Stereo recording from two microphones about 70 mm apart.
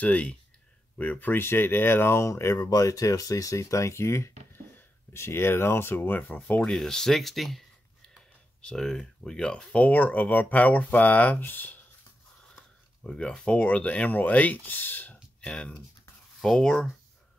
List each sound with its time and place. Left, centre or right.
0.0 s speech: left
2.7 s speech: left
6.6 s speech: centre; by 11.8 s left
13.0 s speech: centre
15.4 s speech: centre